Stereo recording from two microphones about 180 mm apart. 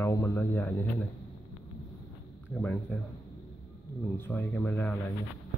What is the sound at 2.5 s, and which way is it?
Speech, 10° left (ahead or behind).